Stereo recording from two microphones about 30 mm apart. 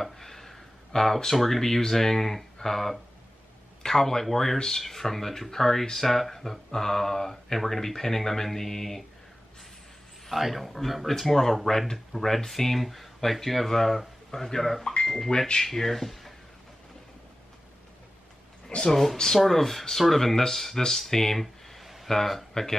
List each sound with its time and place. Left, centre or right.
0.0 s a sound: centre
1.3 s speech: centre
1.6 s speech: centre
4.8 s speech: centre
10.2 s speech: centre
15.3 s speech: left
15.6 s speech: centre
18.9 s speech: centre
21.8 s a sound: centre
22.1 s speech: centre